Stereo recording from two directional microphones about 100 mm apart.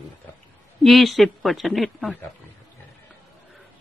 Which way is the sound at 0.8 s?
Centre (ahead or behind).